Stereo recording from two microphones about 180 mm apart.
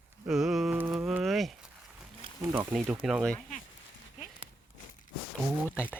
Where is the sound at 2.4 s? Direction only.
15° right (ahead or behind).